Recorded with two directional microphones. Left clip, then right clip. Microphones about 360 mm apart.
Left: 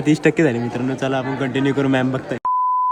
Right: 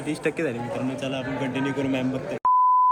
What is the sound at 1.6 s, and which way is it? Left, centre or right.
Speech, left.